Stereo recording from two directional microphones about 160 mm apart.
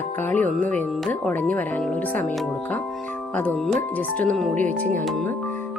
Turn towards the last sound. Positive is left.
turn(degrees=5)  # may be behind; listen again after turning